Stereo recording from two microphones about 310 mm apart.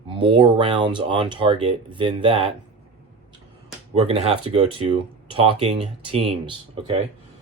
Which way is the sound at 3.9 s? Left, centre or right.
Centre.